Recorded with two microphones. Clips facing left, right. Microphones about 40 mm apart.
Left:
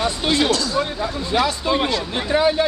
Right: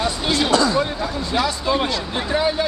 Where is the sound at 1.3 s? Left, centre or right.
Centre.